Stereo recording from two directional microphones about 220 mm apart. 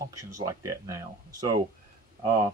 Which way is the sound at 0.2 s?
15° right (ahead or behind).